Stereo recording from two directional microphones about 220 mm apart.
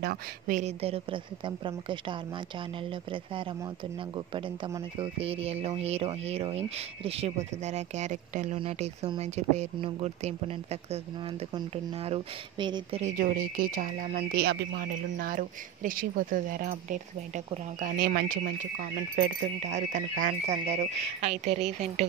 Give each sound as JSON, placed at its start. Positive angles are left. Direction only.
{"t": 0.0, "sound": "speech", "side_deg": -40}
{"t": 4.3, "sound": "speech", "side_deg": -25}
{"t": 13.0, "sound": "speech", "side_deg": -40}